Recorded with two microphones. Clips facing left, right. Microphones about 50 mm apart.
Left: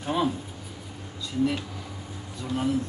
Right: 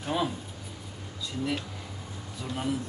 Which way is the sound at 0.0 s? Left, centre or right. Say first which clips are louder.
Left 3 dB; centre.